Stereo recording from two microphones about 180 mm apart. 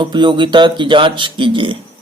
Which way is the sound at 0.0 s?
25° right (ahead or behind).